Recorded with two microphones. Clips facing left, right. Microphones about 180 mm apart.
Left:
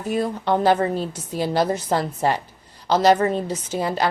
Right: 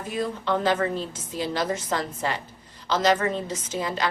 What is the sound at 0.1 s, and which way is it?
A woman's voice, 40° left (ahead or behind).